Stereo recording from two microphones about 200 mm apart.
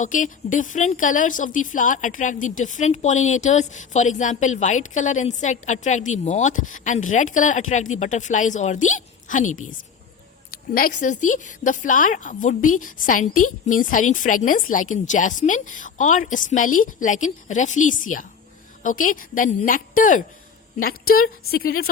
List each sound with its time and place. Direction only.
0.0 s a woman's voice: 40° left (ahead or behind)
10.5 s a woman's voice: 45° left (ahead or behind)